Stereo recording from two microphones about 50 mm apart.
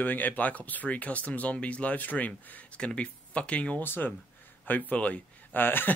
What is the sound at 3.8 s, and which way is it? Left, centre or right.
Speech, left.